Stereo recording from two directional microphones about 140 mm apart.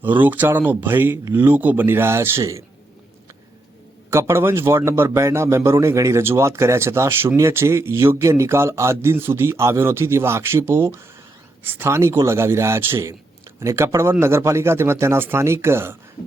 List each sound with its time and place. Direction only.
0.0 s speech: 15° right (ahead or behind)
4.1 s a man's voice: 20° right (ahead or behind)